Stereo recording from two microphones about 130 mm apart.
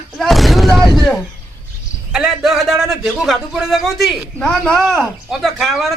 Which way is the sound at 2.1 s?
5° right (ahead or behind).